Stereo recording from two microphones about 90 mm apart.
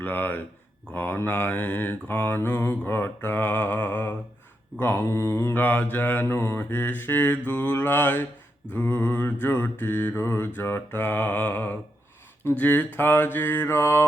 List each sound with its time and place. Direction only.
0.0 s mantra: 20° left (ahead or behind)